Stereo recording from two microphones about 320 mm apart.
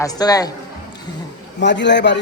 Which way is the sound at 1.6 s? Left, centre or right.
Left.